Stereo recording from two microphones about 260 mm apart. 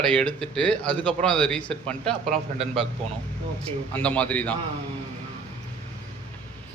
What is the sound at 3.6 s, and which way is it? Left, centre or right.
Speech, centre.